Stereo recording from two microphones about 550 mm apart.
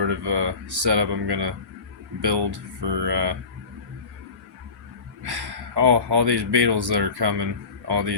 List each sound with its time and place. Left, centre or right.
0.1 s speech: right
5.2 s speech: right